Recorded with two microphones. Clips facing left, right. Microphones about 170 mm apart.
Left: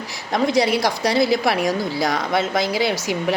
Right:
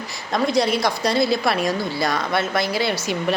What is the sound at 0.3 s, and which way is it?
A woman's voice, 15° left (ahead or behind).